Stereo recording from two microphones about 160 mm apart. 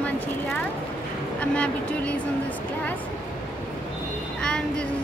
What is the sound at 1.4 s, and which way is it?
Speech, 10° left (ahead or behind).